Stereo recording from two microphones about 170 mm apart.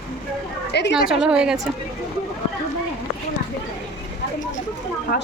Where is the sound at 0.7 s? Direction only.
85° left.